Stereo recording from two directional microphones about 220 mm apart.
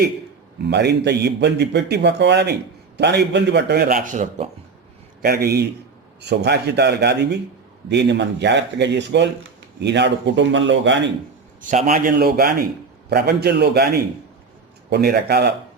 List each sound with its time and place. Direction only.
0.7 s a man's voice: 50° right (ahead or behind)
5.2 s a man's voice: 45° right (ahead or behind)
11.7 s a man's voice: 35° right (ahead or behind)